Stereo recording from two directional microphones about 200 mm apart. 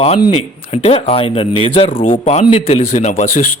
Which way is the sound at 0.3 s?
30° left (ahead or behind).